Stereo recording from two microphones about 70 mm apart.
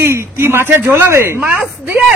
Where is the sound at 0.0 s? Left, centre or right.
Right.